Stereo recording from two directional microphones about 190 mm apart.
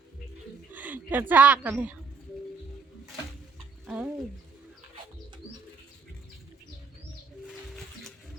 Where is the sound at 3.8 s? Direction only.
5° right (ahead or behind).